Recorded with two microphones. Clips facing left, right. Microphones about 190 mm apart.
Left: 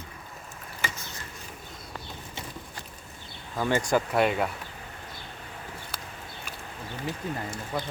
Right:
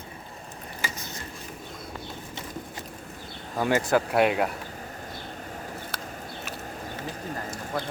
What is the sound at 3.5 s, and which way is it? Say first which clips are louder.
Speech: right 2 dB; 10° right (ahead or behind).